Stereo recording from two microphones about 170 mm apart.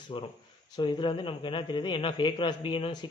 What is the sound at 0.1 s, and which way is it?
A man's voice, 30° left (ahead or behind).